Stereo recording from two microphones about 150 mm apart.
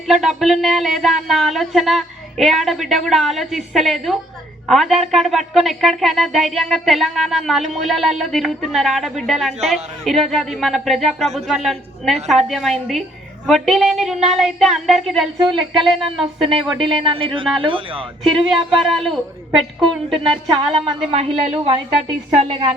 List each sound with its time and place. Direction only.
0.1 s speech: centre (ahead or behind)
15.4 s a woman's voice: 35° right (ahead or behind)
16.1 s speech: centre (ahead or behind)
16.8 s a woman's voice: 35° right (ahead or behind)
18.4 s speech: centre (ahead or behind)
20.8 s a woman's voice: 40° right (ahead or behind)